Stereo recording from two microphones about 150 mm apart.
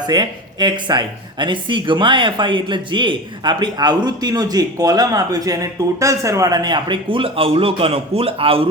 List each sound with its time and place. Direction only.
0.0 s speech: 30° right (ahead or behind)